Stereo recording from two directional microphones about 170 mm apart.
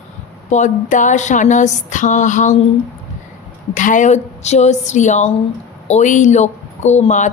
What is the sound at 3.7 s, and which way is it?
Speech, 50° left (ahead or behind).